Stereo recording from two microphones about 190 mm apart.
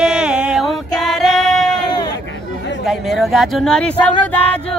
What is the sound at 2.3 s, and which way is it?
Chatter, 70° left (ahead or behind).